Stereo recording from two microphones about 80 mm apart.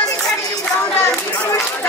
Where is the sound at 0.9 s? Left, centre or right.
Left.